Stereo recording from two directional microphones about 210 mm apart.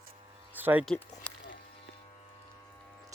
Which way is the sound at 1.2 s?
65° left (ahead or behind).